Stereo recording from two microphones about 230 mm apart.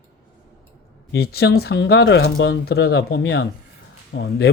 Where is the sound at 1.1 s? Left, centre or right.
Left.